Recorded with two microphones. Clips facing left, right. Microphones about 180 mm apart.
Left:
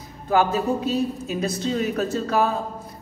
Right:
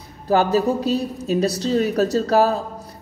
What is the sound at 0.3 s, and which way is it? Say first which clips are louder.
A woman's voice: right 3 dB; 35° right (ahead or behind).